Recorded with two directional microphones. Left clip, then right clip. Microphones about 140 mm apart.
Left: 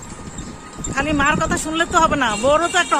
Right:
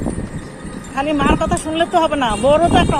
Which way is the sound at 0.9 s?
25° left (ahead or behind).